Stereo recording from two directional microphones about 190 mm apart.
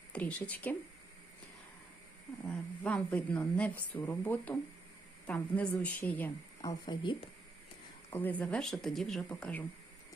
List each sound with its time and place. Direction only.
0.1 s speech: 5° left (ahead or behind)
2.5 s a woman's voice: 5° left (ahead or behind)
6.6 s speech: 20° left (ahead or behind)
8.1 s speech: 10° left (ahead or behind)